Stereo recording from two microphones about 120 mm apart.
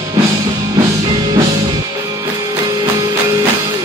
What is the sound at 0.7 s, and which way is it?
Music, 30° right (ahead or behind).